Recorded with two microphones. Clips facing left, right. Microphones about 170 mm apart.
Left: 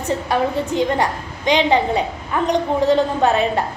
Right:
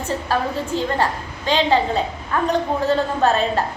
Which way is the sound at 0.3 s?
15° left (ahead or behind).